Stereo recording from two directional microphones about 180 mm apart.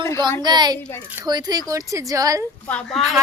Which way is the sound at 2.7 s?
5° left (ahead or behind).